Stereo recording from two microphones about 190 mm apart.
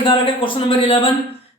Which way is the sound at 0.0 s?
25° left (ahead or behind).